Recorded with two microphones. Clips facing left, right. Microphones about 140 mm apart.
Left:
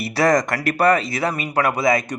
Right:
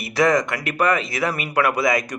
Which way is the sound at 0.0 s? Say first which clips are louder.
Left 1 dB; 35° left (ahead or behind).